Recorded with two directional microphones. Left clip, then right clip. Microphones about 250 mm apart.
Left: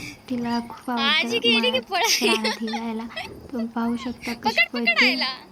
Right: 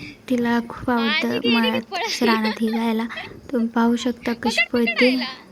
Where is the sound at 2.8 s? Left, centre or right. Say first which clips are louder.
Right 6 dB; centre.